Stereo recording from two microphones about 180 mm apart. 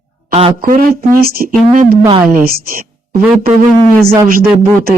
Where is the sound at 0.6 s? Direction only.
55° right (ahead or behind).